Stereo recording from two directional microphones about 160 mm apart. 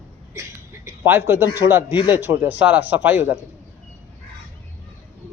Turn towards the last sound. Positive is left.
turn(degrees=-10)  # may be behind; listen again after turning